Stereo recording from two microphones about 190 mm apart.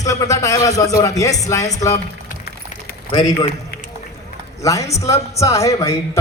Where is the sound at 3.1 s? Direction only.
20° left (ahead or behind).